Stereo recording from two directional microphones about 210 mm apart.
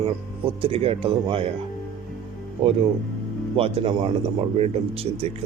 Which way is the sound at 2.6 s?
30° right (ahead or behind).